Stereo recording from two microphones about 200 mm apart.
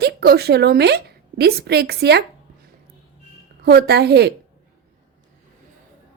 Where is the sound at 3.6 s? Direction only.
50° right (ahead or behind).